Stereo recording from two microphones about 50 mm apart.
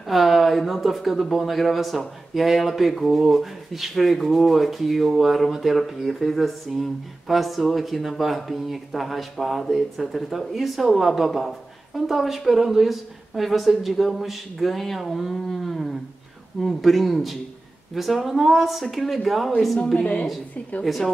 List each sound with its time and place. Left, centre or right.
0.1 s speech: centre
19.9 s a woman's voice: centre
20.8 s speech: centre